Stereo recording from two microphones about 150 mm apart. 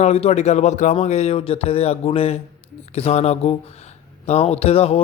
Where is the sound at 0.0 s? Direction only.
45° left (ahead or behind).